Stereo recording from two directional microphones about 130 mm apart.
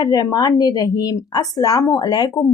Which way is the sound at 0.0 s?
30° left (ahead or behind).